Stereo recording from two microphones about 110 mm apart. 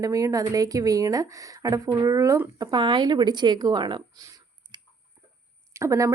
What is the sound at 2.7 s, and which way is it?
Speech, 45° right (ahead or behind).